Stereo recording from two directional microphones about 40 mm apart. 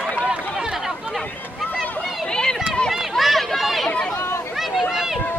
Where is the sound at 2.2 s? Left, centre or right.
Centre.